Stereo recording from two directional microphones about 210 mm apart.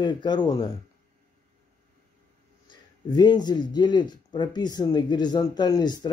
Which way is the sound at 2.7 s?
20° left (ahead or behind).